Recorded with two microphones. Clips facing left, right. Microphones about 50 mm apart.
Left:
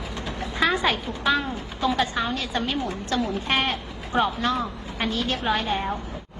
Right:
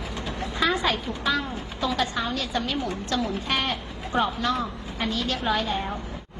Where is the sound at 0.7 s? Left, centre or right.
Left.